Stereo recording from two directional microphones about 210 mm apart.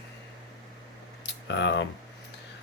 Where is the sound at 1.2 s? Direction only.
60° left (ahead or behind).